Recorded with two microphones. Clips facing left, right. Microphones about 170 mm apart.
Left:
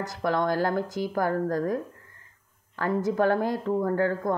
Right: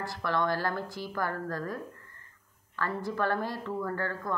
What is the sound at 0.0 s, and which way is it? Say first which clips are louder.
Speech: left 4 dB; 45° left (ahead or behind).